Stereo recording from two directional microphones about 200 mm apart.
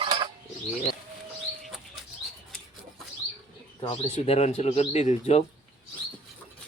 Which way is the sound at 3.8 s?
30° left (ahead or behind).